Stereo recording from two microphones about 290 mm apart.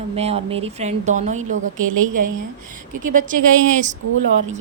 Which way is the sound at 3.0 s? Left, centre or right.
Right.